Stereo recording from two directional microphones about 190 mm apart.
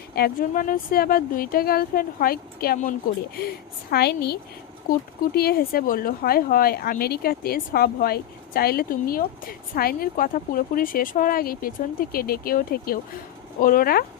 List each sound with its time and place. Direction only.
0.1 s a woman's voice: 50° left (ahead or behind)